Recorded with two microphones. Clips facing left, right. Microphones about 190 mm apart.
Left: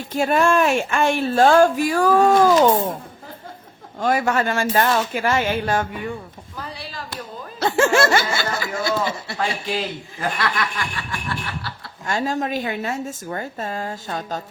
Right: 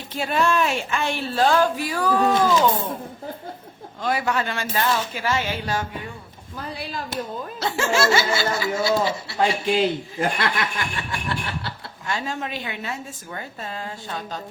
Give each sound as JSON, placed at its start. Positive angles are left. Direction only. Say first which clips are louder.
{"t": 0.1, "sound": "a woman's voice", "louder": "left 4 dB", "side_deg": 50}
{"t": 4.0, "sound": "a woman's voice", "louder": "left 4 dB", "side_deg": 45}
{"t": 7.6, "sound": "a woman's voice", "louder": "left 5 dB", "side_deg": 50}
{"t": 9.4, "sound": "speech", "louder": "right 5 dB", "side_deg": -25}
{"t": 12.0, "sound": "a woman's voice", "louder": "left 6 dB", "side_deg": 45}